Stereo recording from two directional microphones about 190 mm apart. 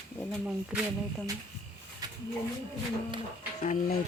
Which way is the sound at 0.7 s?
5° right (ahead or behind).